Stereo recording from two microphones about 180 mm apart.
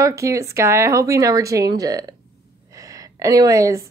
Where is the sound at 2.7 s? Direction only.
20° right (ahead or behind).